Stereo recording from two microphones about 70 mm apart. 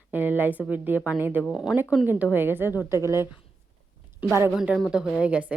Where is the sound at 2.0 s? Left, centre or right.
Right.